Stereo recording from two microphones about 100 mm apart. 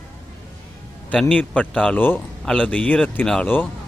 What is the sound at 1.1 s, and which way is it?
Speech, 10° left (ahead or behind).